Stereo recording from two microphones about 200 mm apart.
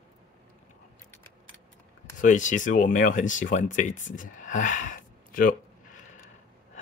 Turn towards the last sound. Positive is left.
turn(degrees=45)  # may be behind; listen again after turning